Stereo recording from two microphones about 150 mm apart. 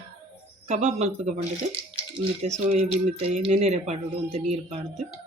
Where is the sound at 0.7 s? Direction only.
50° right (ahead or behind).